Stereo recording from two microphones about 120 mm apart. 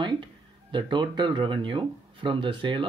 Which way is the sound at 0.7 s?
40° right (ahead or behind).